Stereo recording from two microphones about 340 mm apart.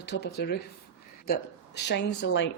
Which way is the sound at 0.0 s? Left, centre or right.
Left.